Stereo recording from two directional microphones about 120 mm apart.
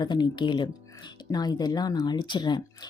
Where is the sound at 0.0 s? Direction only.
40° left (ahead or behind).